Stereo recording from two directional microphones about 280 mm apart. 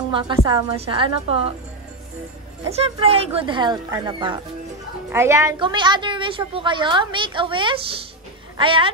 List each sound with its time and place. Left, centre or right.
0.1 s a woman's voice: centre
2.7 s a woman's voice: right